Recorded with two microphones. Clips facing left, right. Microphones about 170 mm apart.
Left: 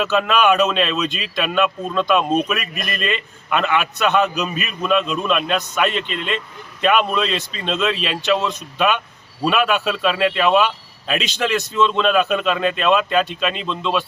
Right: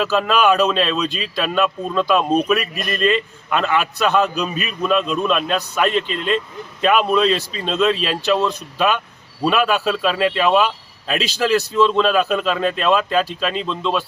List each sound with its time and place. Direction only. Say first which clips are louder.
0.0 s a man's voice: even; centre (ahead or behind)